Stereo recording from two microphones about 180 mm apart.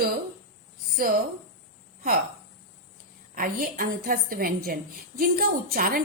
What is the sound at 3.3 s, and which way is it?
A woman's voice, 55° right (ahead or behind).